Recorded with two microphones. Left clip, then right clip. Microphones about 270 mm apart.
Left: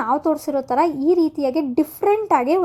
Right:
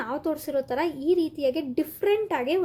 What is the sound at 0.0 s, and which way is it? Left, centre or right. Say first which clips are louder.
A woman's voice: left 9 dB; centre.